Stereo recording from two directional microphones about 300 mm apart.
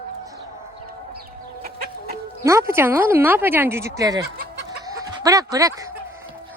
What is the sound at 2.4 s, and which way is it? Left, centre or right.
Speech, centre.